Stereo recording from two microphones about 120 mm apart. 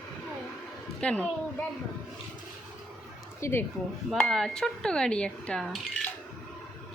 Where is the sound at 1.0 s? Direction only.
10° left (ahead or behind).